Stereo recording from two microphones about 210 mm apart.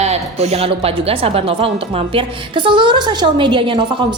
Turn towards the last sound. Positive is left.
turn(degrees=-25)  # may be behind; listen again after turning